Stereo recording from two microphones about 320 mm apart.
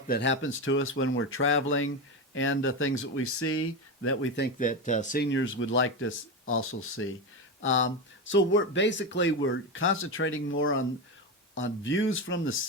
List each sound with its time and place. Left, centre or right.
0.1 s speech: left